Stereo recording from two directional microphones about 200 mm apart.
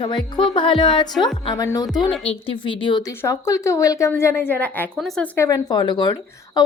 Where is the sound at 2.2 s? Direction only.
30° left (ahead or behind).